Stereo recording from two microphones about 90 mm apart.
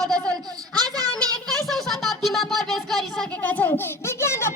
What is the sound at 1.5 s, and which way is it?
Music, 5° left (ahead or behind).